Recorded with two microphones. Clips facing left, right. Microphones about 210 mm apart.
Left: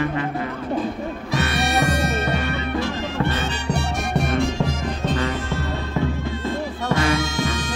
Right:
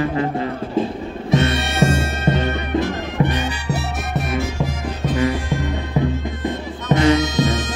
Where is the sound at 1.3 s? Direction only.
25° right (ahead or behind).